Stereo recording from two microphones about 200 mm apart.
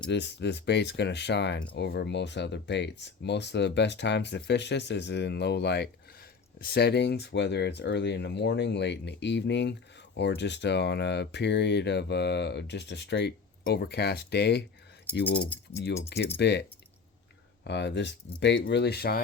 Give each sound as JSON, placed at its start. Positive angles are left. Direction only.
{"t": 0.1, "sound": "speech", "side_deg": 60}
{"t": 16.0, "sound": "speech", "side_deg": 55}